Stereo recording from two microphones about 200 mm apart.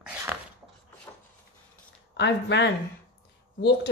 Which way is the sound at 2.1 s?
60° left (ahead or behind).